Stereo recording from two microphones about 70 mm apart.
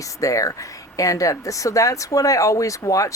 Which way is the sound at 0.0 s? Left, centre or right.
Left.